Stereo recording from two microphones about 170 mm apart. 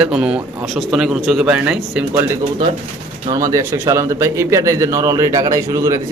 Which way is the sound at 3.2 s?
20° right (ahead or behind).